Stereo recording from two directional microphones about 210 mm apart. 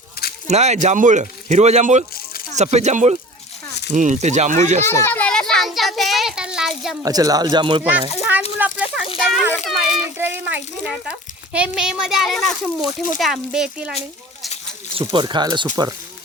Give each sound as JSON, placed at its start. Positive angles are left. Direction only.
{"t": 0.4, "sound": "speech", "side_deg": -30}
{"t": 4.9, "sound": "a sound", "side_deg": 10}
{"t": 7.0, "sound": "speech", "side_deg": -15}
{"t": 8.2, "sound": "a sound", "side_deg": -5}
{"t": 9.1, "sound": "a child's voice", "side_deg": 0}
{"t": 15.0, "sound": "speech", "side_deg": -20}